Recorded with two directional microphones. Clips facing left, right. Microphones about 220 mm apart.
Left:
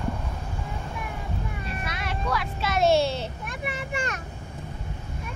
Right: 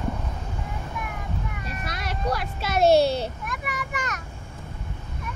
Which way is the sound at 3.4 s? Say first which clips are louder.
Even; 30° left (ahead or behind).